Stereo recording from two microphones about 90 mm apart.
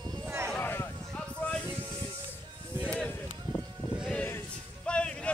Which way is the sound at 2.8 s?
15° left (ahead or behind).